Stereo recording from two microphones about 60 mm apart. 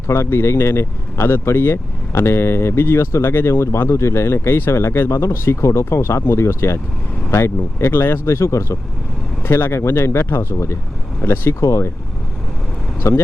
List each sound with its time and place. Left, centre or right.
0.1 s speech: left
9.4 s speech: left
13.0 s speech: left